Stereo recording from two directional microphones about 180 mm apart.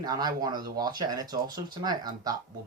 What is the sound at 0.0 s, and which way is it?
Speech, 20° right (ahead or behind).